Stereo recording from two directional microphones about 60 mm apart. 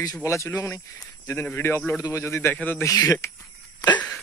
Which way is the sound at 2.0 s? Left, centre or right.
Left.